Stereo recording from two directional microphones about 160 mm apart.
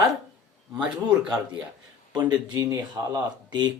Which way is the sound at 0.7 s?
5° right (ahead or behind).